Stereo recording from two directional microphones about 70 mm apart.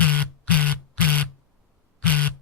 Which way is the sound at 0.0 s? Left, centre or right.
Left.